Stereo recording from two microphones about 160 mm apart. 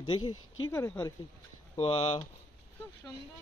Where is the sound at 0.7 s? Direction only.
15° left (ahead or behind).